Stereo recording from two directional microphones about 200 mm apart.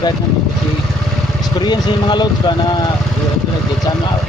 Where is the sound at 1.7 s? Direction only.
20° left (ahead or behind).